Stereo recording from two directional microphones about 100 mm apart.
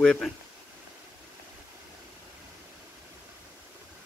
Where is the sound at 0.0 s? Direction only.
10° left (ahead or behind).